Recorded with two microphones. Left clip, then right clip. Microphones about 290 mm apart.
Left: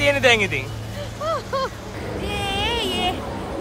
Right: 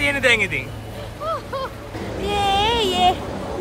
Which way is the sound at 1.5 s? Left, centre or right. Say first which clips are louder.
Left 3 dB; left.